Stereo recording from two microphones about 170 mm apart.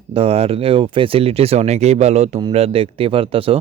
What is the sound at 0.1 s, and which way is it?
Speech, 35° right (ahead or behind).